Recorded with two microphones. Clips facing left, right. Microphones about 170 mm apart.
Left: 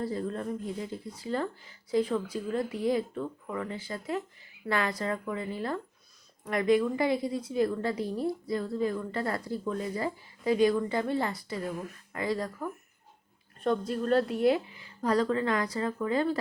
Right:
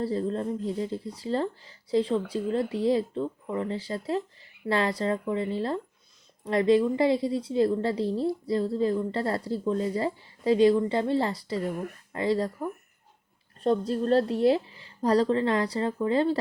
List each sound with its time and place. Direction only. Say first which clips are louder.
0.0 s a woman's voice: right 4 dB; 30° right (ahead or behind)